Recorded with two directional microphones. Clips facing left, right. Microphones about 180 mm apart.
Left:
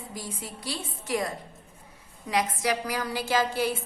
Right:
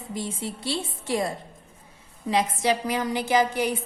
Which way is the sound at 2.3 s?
25° right (ahead or behind).